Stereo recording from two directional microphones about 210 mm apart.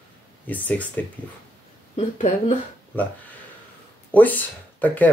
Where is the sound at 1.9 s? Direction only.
35° left (ahead or behind).